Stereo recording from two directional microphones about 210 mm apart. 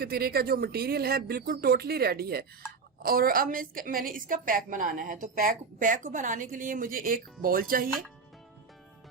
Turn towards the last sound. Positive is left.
turn(degrees=-45)  # may be behind; listen again after turning